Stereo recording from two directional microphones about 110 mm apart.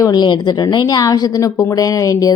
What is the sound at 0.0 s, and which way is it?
Speech, 40° left (ahead or behind).